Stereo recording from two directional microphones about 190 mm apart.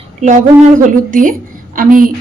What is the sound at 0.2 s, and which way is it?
A woman's voice, 40° right (ahead or behind).